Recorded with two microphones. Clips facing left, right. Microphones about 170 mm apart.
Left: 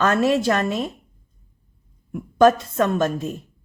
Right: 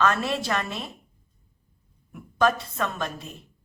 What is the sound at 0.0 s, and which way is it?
Speech, 45° left (ahead or behind).